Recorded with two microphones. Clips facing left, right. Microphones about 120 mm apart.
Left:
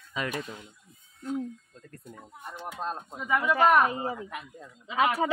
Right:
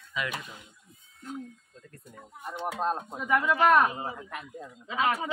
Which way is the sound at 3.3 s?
15° left (ahead or behind).